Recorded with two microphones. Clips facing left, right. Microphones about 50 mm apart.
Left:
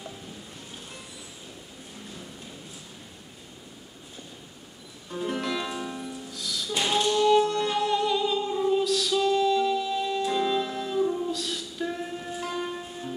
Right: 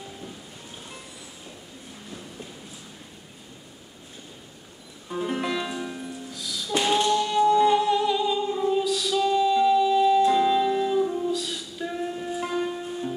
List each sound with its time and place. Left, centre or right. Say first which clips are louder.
5.1 s music: right 2 dB; centre
5.7 s music: right 1 dB; centre